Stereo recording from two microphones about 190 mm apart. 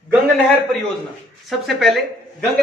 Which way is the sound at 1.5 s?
Centre (ahead or behind).